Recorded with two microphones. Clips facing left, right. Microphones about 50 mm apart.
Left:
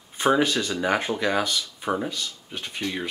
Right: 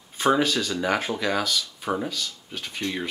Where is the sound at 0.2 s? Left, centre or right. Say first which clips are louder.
Even; centre.